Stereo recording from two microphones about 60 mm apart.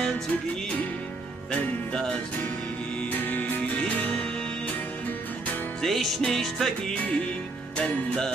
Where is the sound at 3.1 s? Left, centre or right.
Left.